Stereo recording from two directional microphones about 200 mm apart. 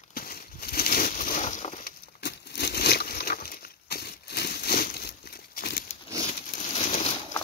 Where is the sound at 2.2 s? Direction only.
55° left (ahead or behind).